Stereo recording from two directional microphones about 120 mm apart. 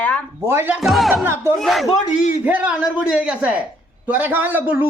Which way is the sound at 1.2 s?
20° right (ahead or behind).